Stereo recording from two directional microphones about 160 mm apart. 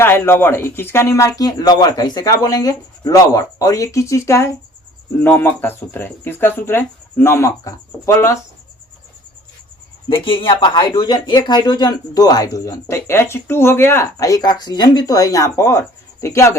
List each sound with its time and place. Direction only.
0.0 s speech: 15° left (ahead or behind)
10.1 s speech: 35° left (ahead or behind)